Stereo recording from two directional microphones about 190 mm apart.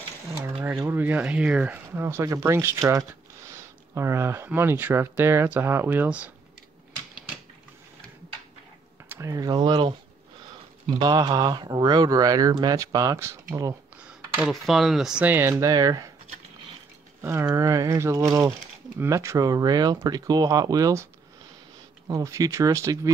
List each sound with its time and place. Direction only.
0.3 s a sound: 20° right (ahead or behind)
0.7 s speech: 10° right (ahead or behind)
9.1 s speech: 15° right (ahead or behind)
11.0 s speech: 20° right (ahead or behind)
14.0 s speech: 5° right (ahead or behind)
17.2 s speech: 15° right (ahead or behind)